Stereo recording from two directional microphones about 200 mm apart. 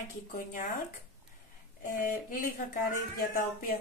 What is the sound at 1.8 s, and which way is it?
Speech, 40° left (ahead or behind).